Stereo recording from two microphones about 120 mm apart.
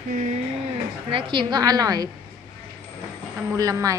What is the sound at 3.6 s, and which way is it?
Speech, 30° right (ahead or behind).